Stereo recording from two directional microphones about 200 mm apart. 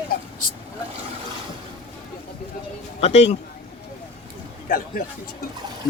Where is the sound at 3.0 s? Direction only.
30° left (ahead or behind).